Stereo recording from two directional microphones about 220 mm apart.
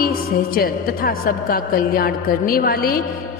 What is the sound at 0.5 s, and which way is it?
A woman's voice, 40° left (ahead or behind).